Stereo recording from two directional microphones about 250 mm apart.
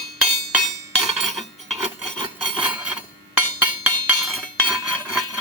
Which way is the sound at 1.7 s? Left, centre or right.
Centre.